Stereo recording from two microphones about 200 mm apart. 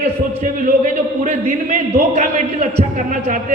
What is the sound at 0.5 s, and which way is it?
A man's voice, 40° right (ahead or behind).